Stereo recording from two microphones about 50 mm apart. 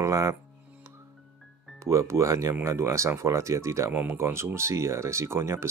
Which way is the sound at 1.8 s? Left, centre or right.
Right.